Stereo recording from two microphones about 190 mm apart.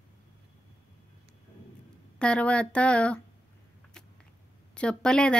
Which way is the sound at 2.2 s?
5° left (ahead or behind).